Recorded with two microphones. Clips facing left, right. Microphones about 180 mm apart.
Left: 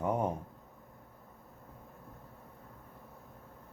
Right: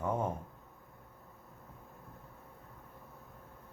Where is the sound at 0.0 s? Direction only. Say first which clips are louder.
Left 2 dB; 15° left (ahead or behind).